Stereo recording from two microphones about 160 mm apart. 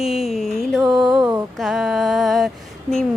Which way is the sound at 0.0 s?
Centre (ahead or behind).